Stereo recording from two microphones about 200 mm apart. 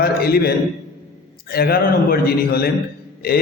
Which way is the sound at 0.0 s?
50° left (ahead or behind).